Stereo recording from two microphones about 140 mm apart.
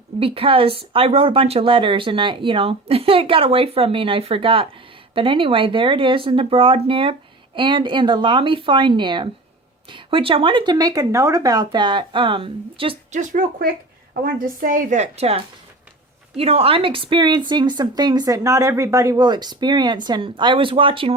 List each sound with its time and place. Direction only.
0.2 s a woman's voice: 40° right (ahead or behind)
13.1 s speech: 70° right (ahead or behind)
14.3 s a woman's voice: 85° right; by 21.2 s 40° right (ahead or behind)